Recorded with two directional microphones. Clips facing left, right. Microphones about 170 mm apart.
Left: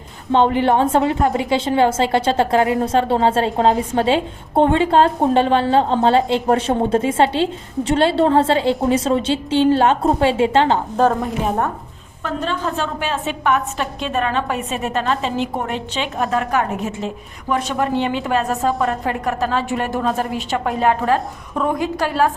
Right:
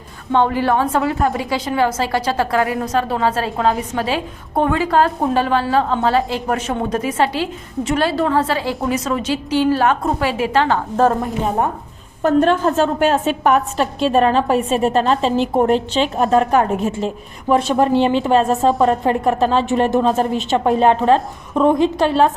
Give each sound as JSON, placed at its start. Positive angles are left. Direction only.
{"t": 0.3, "sound": "a woman's voice", "side_deg": 25}
{"t": 10.9, "sound": "a woman's voice", "side_deg": 0}
{"t": 12.2, "sound": "a woman's voice", "side_deg": -50}